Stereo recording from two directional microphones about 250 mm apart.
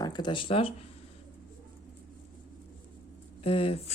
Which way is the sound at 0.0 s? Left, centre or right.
Centre.